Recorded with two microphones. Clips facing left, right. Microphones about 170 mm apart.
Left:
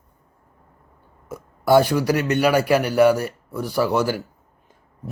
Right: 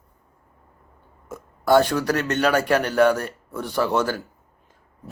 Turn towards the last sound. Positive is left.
turn(degrees=10)  # may be behind; listen again after turning